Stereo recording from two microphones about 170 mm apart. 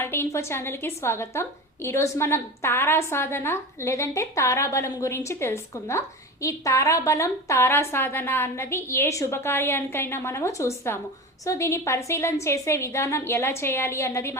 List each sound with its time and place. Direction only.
0.0 s a woman's voice: 15° left (ahead or behind)